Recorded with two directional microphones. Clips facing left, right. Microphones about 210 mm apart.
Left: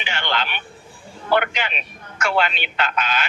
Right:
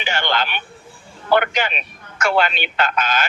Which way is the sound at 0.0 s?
45° right (ahead or behind).